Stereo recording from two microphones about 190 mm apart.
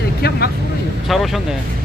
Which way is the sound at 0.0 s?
55° left (ahead or behind).